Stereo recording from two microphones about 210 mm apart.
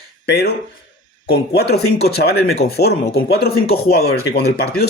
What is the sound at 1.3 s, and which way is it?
Speech, 50° left (ahead or behind).